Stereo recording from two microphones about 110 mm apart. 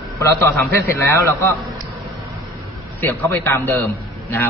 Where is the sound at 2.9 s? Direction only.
20° left (ahead or behind).